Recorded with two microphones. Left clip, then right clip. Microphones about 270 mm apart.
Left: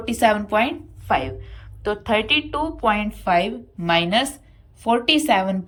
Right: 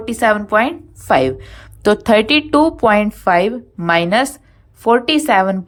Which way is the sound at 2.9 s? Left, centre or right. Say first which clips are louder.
Right 7 dB; centre.